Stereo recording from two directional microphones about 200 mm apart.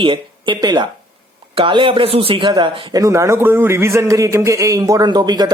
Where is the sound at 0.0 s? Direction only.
25° right (ahead or behind).